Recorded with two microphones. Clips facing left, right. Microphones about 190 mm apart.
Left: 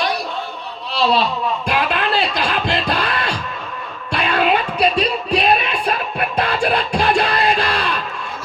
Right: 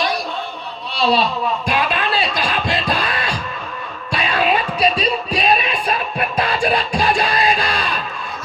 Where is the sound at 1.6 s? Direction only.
60° left (ahead or behind).